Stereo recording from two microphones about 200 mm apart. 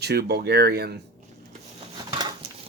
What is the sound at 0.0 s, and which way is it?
Speech, 55° right (ahead or behind).